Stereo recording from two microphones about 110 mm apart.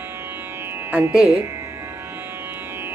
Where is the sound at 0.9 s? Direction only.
15° right (ahead or behind).